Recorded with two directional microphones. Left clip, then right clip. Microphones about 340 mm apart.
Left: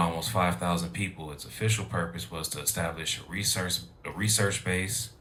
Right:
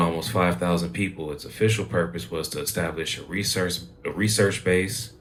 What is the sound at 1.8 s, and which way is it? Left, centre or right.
Speech, left.